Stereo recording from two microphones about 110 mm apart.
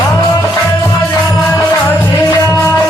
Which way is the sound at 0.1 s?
25° left (ahead or behind).